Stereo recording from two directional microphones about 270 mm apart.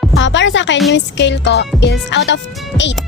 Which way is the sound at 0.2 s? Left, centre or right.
Left.